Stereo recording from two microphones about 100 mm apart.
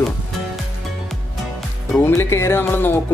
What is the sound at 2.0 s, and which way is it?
Speech, 25° left (ahead or behind).